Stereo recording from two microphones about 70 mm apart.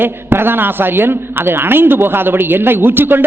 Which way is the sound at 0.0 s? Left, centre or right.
Right.